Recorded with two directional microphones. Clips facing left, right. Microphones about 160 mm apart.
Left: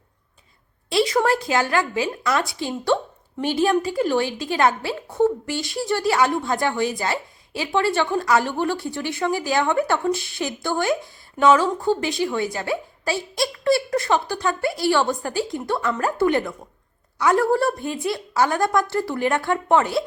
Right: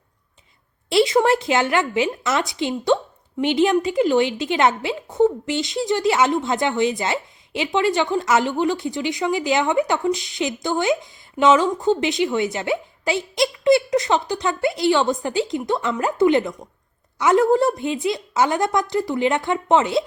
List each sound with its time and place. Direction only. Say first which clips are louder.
0.9 s a woman's voice: right 3 dB; 25° right (ahead or behind)